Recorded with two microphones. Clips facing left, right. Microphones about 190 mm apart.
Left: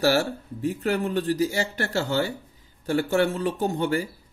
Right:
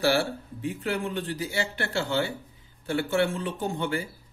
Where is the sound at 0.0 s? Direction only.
40° left (ahead or behind).